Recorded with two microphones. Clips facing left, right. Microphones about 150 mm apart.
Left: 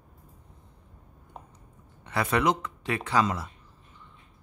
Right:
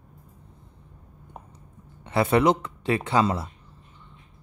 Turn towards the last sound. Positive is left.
turn(degrees=-25)  # may be behind; listen again after turning